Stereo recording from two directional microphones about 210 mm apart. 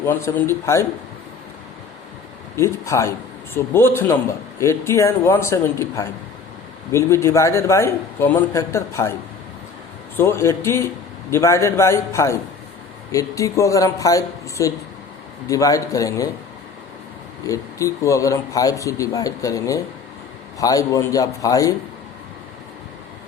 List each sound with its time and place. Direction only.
0.0 s a man's voice: 10° left (ahead or behind)
2.6 s a man's voice: 15° left (ahead or behind)
10.2 s a man's voice: 10° left (ahead or behind)
17.4 s a man's voice: 15° left (ahead or behind)